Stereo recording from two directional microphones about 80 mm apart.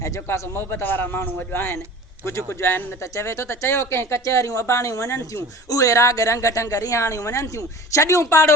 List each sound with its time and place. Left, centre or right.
0.0 s a man's voice: left